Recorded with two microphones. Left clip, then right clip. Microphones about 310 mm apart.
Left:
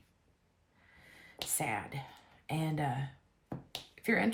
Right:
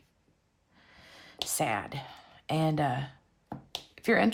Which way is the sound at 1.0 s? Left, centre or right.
Centre.